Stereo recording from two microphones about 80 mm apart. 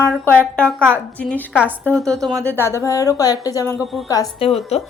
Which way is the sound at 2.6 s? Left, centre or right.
Left.